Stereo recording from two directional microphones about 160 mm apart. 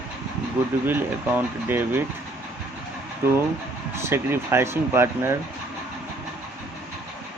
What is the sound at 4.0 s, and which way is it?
Speech, 15° right (ahead or behind).